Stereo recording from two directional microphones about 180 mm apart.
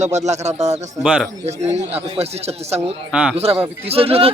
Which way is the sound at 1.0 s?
5° right (ahead or behind).